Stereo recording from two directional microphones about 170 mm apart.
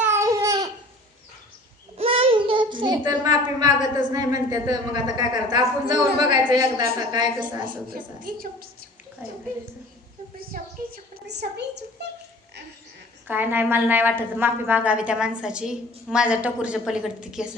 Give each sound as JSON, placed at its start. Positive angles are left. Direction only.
{"t": 0.0, "sound": "babbling", "side_deg": -15}
{"t": 2.0, "sound": "child singing", "side_deg": -35}
{"t": 3.1, "sound": "a woman's voice", "side_deg": -25}
{"t": 7.9, "sound": "a woman's voice", "side_deg": -55}
{"t": 9.2, "sound": "a woman's voice", "side_deg": -10}
{"t": 10.3, "sound": "a woman's voice", "side_deg": -60}
{"t": 13.2, "sound": "a woman's voice", "side_deg": -10}